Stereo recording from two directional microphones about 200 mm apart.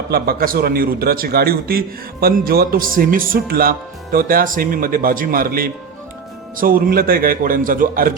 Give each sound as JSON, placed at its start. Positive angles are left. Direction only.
{"t": 0.1, "sound": "speech", "side_deg": -50}